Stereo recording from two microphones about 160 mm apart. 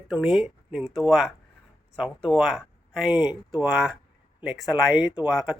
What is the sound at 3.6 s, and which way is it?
Speech, 5° right (ahead or behind).